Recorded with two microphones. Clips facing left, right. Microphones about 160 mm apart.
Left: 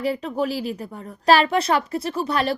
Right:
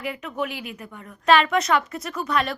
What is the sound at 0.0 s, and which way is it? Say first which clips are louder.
Speech: left 5 dB; 35° left (ahead or behind).